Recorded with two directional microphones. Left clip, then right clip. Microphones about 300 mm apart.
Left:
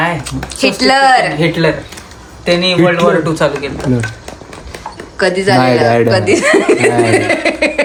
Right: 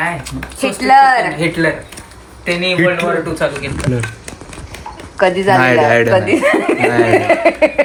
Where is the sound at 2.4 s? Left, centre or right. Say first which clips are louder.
Left 3 dB; left.